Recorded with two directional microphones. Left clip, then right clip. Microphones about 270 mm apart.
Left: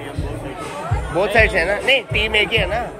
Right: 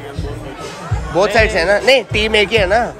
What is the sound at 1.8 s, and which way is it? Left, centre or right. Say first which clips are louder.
A man's voice: right 4 dB; right.